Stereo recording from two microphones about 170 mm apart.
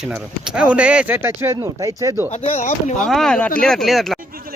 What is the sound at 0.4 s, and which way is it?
Speech, 5° right (ahead or behind).